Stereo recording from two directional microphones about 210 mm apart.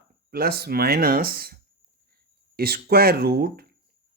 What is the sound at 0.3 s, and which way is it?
Speech, 45° right (ahead or behind).